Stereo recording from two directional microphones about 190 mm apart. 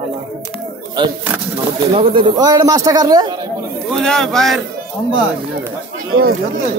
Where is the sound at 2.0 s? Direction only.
25° right (ahead or behind).